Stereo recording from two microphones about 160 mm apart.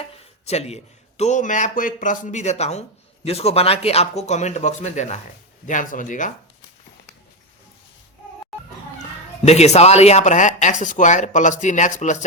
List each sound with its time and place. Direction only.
0.1 s speech: 40° left (ahead or behind)
9.0 s speech: 45° left (ahead or behind)